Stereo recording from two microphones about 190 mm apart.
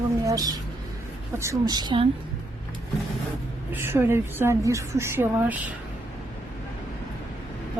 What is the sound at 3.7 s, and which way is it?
A woman's voice, 10° right (ahead or behind).